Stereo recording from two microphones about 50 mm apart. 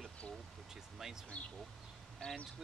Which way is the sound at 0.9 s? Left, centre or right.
Centre.